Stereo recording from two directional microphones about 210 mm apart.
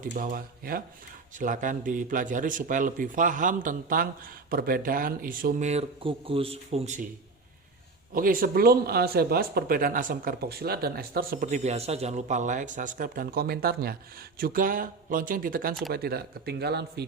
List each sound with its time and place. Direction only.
0.0 s a man's voice: 40° right (ahead or behind)
8.1 s a man's voice: 40° right (ahead or behind)